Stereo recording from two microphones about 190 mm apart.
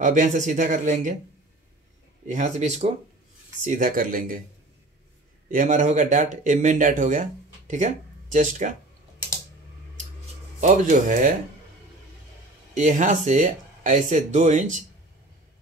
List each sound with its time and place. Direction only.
0.0 s speech: 40° right (ahead or behind)
2.2 s speech: 40° right (ahead or behind)
5.5 s speech: 40° right (ahead or behind)
10.6 s speech: 40° right (ahead or behind)
12.7 s speech: 40° right (ahead or behind)